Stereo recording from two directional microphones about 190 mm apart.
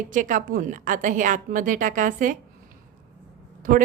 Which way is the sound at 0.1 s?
40° right (ahead or behind).